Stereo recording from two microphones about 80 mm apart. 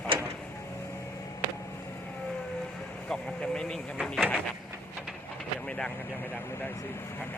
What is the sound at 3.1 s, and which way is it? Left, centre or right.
Speech, centre.